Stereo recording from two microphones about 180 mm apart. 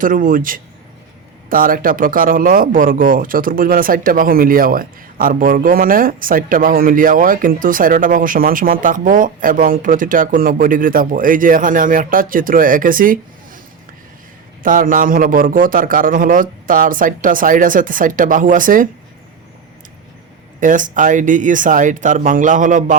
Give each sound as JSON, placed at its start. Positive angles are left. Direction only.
{"t": 0.0, "sound": "speech", "side_deg": -50}
{"t": 14.6, "sound": "speech", "side_deg": -50}
{"t": 20.6, "sound": "speech", "side_deg": -45}